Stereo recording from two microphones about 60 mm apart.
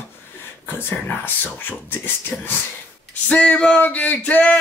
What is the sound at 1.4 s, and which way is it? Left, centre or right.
Speech, left.